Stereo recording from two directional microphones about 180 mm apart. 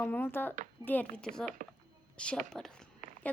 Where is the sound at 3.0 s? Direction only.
45° right (ahead or behind).